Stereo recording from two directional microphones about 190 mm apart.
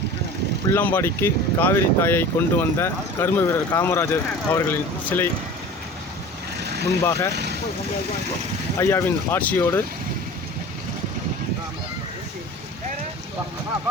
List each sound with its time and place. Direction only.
0.7 s speech: 10° left (ahead or behind)
6.6 s vehicle: 60° right (ahead or behind)
7.0 s speech: 15° left (ahead or behind)
8.8 s speech: 15° left (ahead or behind)